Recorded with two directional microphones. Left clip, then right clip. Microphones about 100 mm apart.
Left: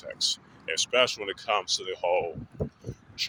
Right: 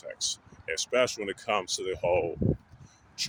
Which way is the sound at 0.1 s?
30° right (ahead or behind).